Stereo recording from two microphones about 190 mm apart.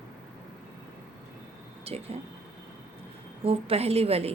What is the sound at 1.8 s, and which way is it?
Speech, 30° right (ahead or behind).